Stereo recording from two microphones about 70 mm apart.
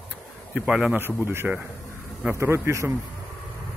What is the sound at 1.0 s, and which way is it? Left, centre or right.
A man's voice, right.